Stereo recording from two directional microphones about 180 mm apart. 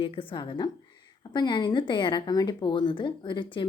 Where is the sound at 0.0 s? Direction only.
30° left (ahead or behind).